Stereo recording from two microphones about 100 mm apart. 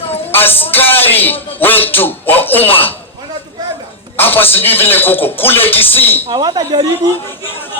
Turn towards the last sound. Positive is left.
turn(degrees=-40)  # may be behind; listen again after turning